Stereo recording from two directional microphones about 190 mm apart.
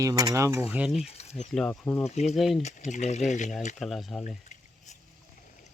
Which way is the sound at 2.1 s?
35° left (ahead or behind).